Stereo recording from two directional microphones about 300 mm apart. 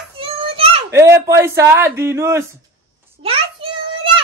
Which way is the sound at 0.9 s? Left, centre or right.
Centre.